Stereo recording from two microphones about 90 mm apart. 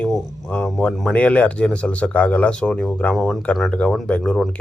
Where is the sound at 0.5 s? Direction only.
10° left (ahead or behind).